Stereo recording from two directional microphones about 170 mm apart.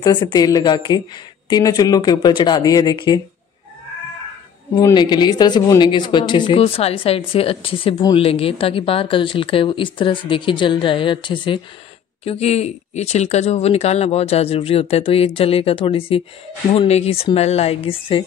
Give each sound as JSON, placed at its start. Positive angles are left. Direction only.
{"t": 0.0, "sound": "speech", "side_deg": 25}
{"t": 4.7, "sound": "speech", "side_deg": 25}